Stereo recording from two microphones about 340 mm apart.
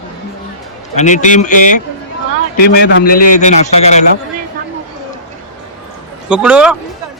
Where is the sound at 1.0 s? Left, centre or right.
Left.